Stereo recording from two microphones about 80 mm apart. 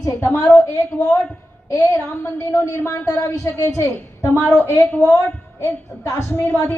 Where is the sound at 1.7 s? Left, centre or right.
Left.